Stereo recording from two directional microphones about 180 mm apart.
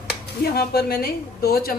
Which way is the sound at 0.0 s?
60° left (ahead or behind).